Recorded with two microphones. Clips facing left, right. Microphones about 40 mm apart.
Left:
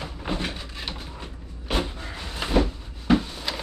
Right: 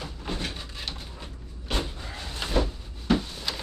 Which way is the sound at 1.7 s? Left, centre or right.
Centre.